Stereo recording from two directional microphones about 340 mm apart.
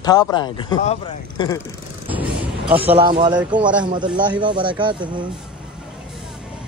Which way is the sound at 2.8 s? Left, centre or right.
Centre.